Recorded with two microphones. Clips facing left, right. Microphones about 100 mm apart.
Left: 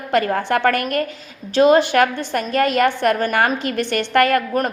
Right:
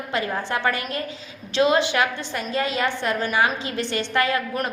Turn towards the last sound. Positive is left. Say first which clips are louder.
# left 6 dB
turn(degrees=60)  # may be behind; listen again after turning